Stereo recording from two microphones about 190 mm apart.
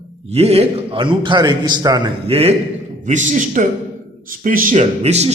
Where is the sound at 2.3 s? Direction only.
30° right (ahead or behind).